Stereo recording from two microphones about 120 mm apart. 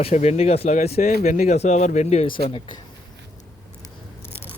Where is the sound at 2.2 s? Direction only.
45° left (ahead or behind).